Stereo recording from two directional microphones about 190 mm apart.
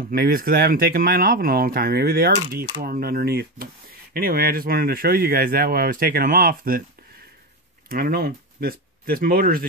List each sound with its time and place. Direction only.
0.1 s speech: 50° right (ahead or behind)
7.9 s speech: 55° right (ahead or behind)